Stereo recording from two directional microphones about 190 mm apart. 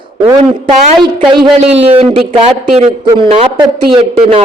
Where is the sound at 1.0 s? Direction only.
25° right (ahead or behind).